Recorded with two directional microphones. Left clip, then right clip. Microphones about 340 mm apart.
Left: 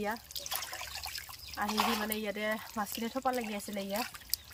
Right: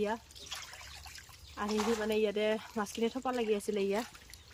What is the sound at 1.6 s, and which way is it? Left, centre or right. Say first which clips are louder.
Speech: left 1 dB; centre.